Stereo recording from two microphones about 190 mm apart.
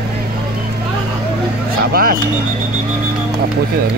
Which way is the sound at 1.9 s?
50° right (ahead or behind).